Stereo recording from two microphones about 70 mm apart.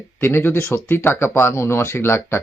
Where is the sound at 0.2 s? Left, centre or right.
Left.